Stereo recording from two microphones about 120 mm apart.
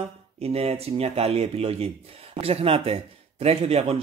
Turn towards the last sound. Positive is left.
turn(degrees=-60)  # may be behind; listen again after turning